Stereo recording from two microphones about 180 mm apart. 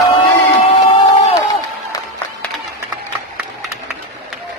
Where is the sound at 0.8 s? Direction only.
25° left (ahead or behind).